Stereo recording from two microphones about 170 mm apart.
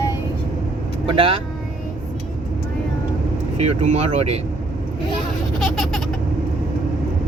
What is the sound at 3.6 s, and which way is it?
Speech, 40° right (ahead or behind).